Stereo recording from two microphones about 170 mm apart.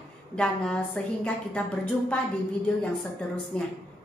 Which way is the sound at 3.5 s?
5° left (ahead or behind).